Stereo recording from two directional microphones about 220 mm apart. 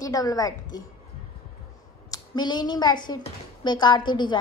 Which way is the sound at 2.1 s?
20° left (ahead or behind).